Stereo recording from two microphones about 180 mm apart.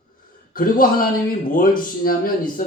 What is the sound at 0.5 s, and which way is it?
Speech, 50° left (ahead or behind).